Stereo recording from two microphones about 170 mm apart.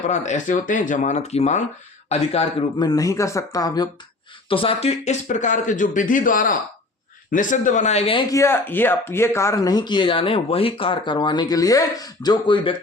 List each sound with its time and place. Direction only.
0.1 s speech: 45° left (ahead or behind); by 3.8 s 20° left (ahead or behind)
4.4 s speech: 30° left (ahead or behind)
8.3 s speech: 15° left (ahead or behind)